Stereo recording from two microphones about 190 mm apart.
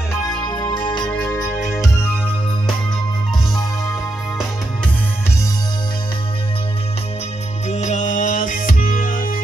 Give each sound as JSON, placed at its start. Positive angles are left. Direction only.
{"t": 0.3, "sound": "music", "side_deg": 20}
{"t": 1.1, "sound": "music", "side_deg": 5}
{"t": 7.7, "sound": "music", "side_deg": 40}